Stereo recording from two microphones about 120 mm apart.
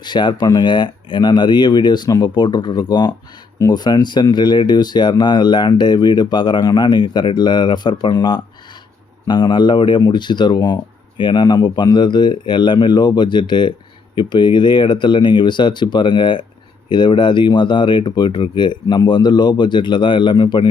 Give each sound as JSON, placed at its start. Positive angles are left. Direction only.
{"t": 0.0, "sound": "speech", "side_deg": 40}